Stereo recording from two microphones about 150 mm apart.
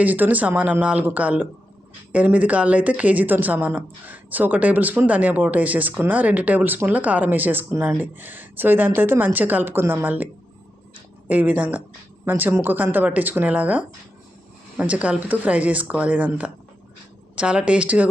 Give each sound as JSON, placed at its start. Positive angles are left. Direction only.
{"t": 0.0, "sound": "a woman's voice", "side_deg": -10}
{"t": 11.3, "sound": "a woman's voice", "side_deg": -10}